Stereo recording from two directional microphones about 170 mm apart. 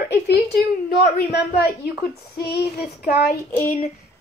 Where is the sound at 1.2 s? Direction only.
75° left (ahead or behind).